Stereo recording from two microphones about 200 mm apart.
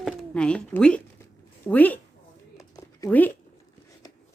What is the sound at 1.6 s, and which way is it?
Speech, 10° left (ahead or behind).